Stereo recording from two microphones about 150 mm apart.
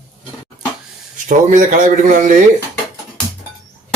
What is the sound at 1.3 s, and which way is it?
Speech, 60° right (ahead or behind).